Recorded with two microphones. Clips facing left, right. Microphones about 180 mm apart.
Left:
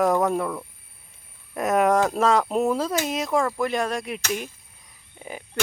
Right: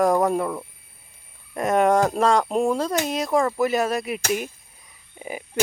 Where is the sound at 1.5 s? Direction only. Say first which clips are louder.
Right 1 dB; centre (ahead or behind).